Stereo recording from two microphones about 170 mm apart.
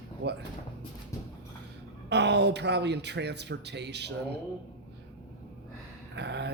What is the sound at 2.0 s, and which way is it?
Speech, 90° right.